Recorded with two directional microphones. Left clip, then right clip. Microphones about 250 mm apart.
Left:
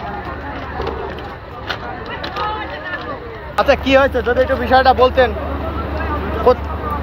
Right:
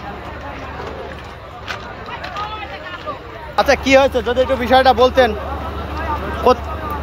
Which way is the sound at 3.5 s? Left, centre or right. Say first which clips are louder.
Even; right.